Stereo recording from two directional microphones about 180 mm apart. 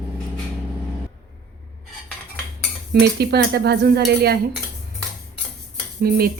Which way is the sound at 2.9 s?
65° right (ahead or behind).